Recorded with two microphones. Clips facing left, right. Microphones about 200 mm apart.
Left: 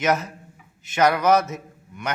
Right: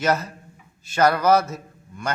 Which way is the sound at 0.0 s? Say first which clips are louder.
Even; 15° left (ahead or behind).